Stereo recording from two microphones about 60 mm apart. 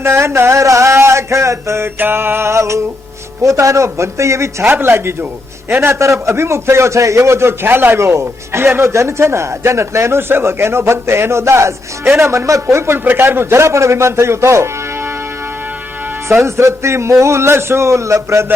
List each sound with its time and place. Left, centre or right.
0.0 s a man's voice: right
0.6 s a sound: right
2.0 s a man's voice: right
4.6 s a man's voice: right
7.9 s a man's voice: right
16.4 s a man's voice: right